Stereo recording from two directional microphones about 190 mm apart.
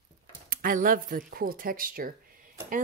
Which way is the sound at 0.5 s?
50° right (ahead or behind).